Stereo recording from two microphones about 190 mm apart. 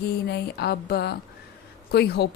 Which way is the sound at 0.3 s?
60° left (ahead or behind).